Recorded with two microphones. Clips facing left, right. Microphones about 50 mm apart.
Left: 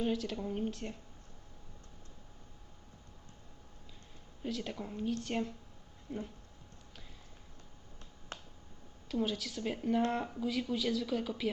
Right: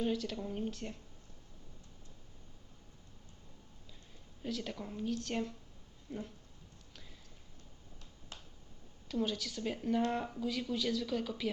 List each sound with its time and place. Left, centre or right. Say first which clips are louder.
0.0 s speech: left 1 dB; centre
4.4 s speech: left 1 dB; centre
8.3 s finger snapping: left 6 dB; left
9.0 s speech: left 1 dB; centre